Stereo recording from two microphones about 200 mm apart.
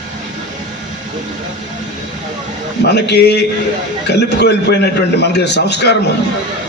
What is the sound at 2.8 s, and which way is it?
A man's voice, 55° left (ahead or behind).